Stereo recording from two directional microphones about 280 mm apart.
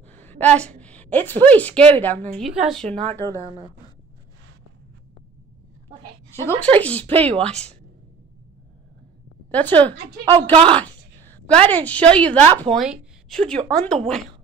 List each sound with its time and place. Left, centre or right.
0.0 s a woman's voice: centre
6.3 s speech: centre
7.2 s speech: right
9.5 s speech: centre
10.5 s speech: centre
10.8 s a woman's voice: centre